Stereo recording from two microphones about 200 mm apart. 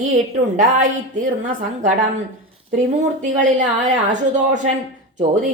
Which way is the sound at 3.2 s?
40° right (ahead or behind).